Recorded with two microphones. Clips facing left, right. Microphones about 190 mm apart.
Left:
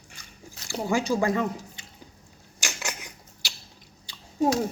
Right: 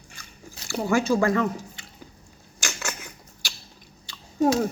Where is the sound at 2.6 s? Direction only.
15° left (ahead or behind).